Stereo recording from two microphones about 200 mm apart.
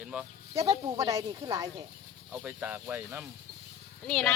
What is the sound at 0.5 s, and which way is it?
Speech, 15° right (ahead or behind).